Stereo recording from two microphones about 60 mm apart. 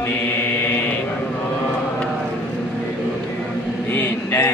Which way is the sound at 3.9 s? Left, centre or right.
Left.